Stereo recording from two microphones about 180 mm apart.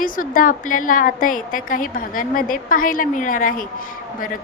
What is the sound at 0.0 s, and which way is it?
A woman's voice, 50° left (ahead or behind).